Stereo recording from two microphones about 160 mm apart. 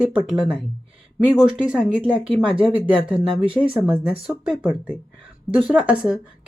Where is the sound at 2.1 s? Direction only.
35° right (ahead or behind).